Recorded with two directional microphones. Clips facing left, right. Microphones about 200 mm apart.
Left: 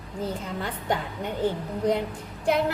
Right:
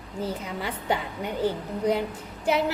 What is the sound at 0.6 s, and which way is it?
Speech, 10° right (ahead or behind).